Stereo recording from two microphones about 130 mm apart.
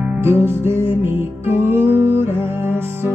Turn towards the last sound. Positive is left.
turn(degrees=-15)  # may be behind; listen again after turning